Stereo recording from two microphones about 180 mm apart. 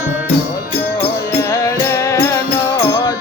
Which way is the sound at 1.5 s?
15° left (ahead or behind).